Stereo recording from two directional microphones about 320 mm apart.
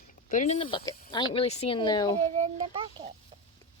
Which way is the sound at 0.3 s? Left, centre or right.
Left.